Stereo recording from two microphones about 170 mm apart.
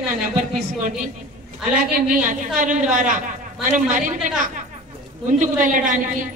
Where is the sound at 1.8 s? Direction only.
55° right (ahead or behind).